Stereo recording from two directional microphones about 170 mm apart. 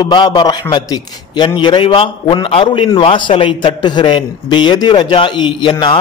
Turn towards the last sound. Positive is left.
turn(degrees=25)  # may be behind; listen again after turning